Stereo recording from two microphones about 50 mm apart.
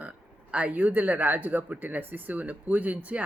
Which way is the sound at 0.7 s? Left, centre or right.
Right.